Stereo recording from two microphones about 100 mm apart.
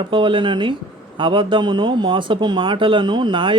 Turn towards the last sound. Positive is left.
turn(degrees=-55)  # may be behind; listen again after turning